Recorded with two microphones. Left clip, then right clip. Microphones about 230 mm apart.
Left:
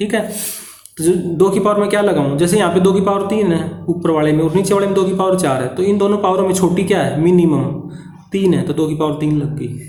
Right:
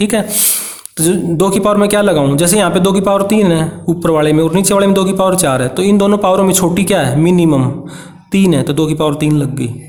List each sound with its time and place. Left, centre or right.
0.0 s a man's voice: right